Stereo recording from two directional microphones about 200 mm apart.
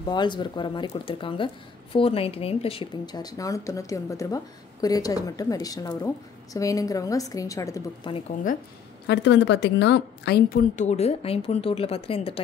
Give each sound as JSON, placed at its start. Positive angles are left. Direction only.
{"t": 0.0, "sound": "a woman's voice", "side_deg": 20}
{"t": 9.0, "sound": "a woman's voice", "side_deg": 60}
{"t": 10.8, "sound": "speech", "side_deg": 35}